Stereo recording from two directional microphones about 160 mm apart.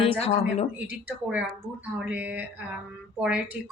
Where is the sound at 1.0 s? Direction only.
10° right (ahead or behind).